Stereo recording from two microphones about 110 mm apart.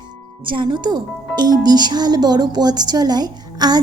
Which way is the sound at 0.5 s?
45° right (ahead or behind).